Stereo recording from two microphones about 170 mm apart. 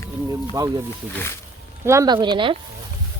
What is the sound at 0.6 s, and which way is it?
Speech, 20° right (ahead or behind).